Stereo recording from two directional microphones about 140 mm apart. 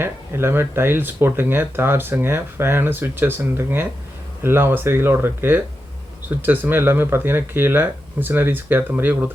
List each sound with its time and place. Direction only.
0.0 s speech: 15° right (ahead or behind)